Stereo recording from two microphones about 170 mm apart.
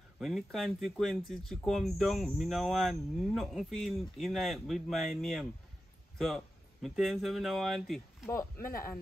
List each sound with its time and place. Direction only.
0.2 s speech: centre (ahead or behind)
8.3 s speech: 15° left (ahead or behind)